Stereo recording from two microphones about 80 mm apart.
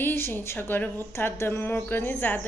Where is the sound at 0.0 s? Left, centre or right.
Left.